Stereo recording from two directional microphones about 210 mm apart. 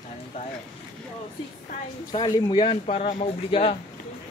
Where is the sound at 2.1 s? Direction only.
25° left (ahead or behind).